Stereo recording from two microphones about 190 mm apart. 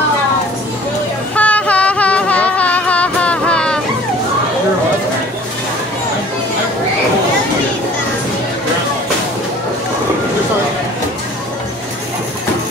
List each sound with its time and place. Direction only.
1.3 s music: 5° left (ahead or behind)